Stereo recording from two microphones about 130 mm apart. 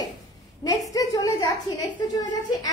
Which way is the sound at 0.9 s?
25° left (ahead or behind).